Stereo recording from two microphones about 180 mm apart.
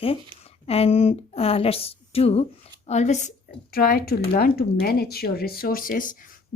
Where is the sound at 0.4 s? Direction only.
35° left (ahead or behind).